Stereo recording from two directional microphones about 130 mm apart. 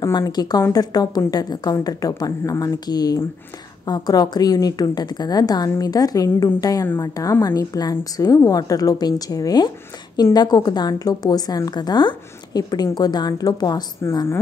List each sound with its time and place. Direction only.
0.2 s a woman's voice: 30° left (ahead or behind)